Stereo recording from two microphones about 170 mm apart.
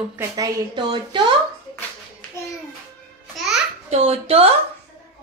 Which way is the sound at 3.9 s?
35° right (ahead or behind).